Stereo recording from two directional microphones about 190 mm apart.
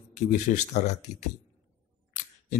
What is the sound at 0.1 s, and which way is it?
Speech, 40° left (ahead or behind).